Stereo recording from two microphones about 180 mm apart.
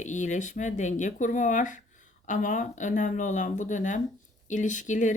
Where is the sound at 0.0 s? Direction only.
40° left (ahead or behind).